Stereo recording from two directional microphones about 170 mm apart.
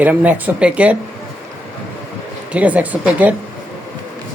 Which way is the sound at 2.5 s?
10° right (ahead or behind).